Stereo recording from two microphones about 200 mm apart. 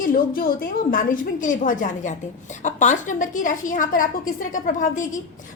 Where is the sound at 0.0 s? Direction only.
45° left (ahead or behind).